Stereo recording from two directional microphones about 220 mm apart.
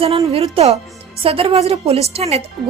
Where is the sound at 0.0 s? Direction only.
25° right (ahead or behind).